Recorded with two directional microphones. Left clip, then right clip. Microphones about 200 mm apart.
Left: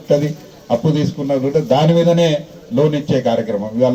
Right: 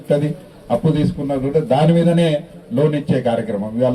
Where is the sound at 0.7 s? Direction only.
30° right (ahead or behind).